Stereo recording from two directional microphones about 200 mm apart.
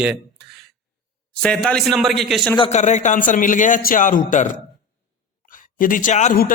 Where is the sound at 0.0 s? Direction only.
5° right (ahead or behind).